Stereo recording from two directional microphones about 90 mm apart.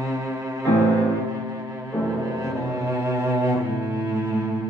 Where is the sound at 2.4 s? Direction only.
30° right (ahead or behind).